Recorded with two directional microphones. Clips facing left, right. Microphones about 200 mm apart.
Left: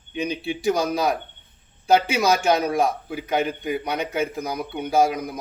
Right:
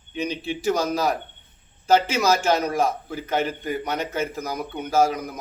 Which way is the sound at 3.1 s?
15° left (ahead or behind).